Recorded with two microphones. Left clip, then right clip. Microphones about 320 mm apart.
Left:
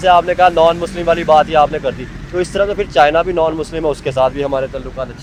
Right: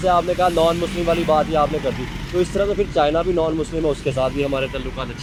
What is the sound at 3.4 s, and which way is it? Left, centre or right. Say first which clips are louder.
Speech: left 5 dB; left.